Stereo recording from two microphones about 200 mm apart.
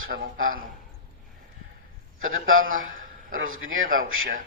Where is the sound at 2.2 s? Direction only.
90° right.